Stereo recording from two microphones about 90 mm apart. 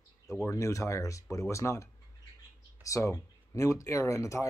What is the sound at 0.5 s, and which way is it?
Speech, 35° left (ahead or behind).